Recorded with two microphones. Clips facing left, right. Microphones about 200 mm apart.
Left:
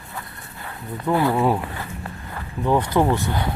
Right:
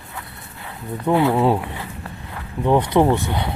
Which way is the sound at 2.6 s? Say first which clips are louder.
Right 3 dB; 20° right (ahead or behind).